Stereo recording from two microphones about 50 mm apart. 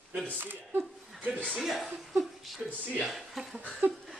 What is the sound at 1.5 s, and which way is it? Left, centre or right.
Speech, centre.